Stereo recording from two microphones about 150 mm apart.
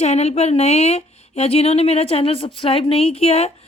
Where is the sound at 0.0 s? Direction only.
45° left (ahead or behind).